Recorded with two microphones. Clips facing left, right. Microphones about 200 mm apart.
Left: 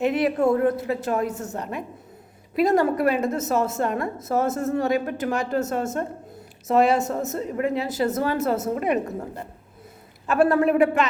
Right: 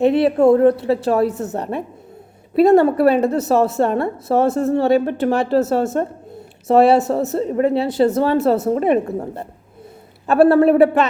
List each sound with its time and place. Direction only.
0.0 s a woman's voice: 30° right (ahead or behind)